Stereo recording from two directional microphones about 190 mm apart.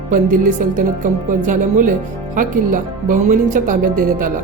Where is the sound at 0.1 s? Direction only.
45° right (ahead or behind).